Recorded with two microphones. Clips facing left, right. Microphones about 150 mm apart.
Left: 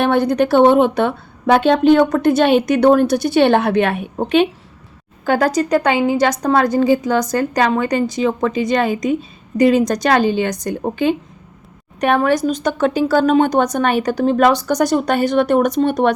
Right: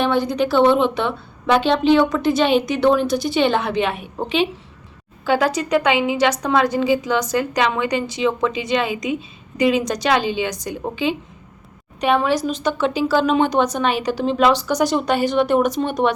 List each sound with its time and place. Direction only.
0.0 s a woman's voice: 55° left (ahead or behind)
11.9 s a woman's voice: 55° left (ahead or behind)